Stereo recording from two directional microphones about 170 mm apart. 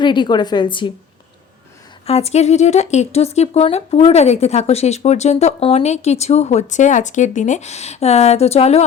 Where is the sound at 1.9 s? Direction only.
35° left (ahead or behind).